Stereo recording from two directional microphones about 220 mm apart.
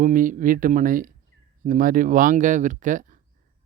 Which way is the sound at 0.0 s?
35° right (ahead or behind).